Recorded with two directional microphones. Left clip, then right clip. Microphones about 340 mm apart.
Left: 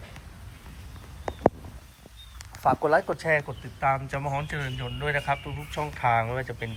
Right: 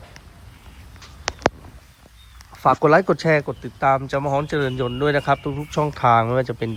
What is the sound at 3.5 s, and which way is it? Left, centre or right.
Speech, right.